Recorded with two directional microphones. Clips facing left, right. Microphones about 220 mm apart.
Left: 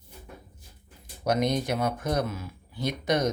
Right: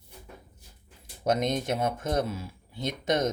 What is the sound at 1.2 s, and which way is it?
Speech, 20° right (ahead or behind).